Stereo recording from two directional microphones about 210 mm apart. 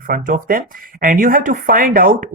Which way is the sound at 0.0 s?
40° right (ahead or behind).